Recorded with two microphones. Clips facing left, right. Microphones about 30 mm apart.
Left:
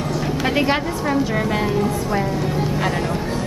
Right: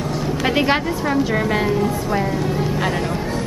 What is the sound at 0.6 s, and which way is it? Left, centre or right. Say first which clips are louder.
A woman's voice: right 2 dB; centre.